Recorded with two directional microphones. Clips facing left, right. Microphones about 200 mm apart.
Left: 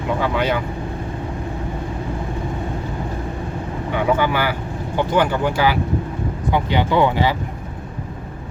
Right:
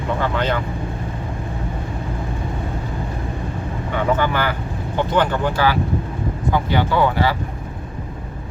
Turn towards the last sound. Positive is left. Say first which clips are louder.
# left 1 dB
turn(degrees=20)  # may be behind; listen again after turning